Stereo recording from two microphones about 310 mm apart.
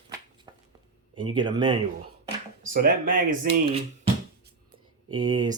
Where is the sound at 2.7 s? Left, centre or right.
Right.